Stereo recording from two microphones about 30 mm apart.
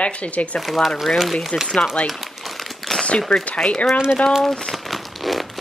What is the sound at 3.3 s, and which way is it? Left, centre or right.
Speech, centre.